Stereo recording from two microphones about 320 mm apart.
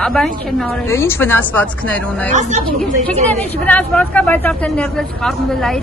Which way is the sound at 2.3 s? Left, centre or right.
Right.